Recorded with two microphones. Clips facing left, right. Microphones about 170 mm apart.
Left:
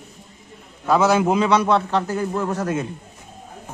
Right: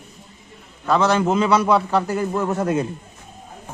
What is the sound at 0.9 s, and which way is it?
A man's voice, 5° left (ahead or behind).